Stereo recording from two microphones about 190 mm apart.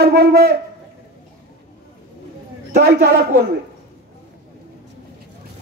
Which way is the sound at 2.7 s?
55° right (ahead or behind).